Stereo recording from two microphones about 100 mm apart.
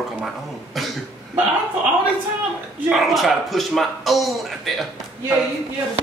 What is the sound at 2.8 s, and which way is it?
Speech, centre (ahead or behind).